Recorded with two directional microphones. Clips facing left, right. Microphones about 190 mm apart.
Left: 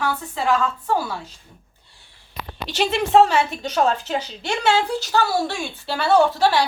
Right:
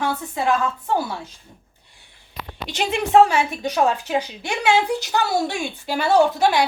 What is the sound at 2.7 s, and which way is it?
A woman's voice, 10° right (ahead or behind).